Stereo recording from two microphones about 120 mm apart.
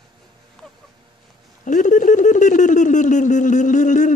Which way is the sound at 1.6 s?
90° left.